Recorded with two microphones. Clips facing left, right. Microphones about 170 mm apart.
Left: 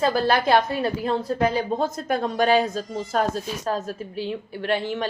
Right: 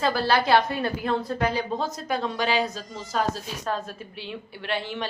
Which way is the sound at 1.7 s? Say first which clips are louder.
Left 4 dB; 50° left (ahead or behind).